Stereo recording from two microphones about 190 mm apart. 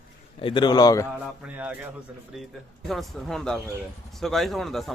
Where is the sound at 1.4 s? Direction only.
10° right (ahead or behind).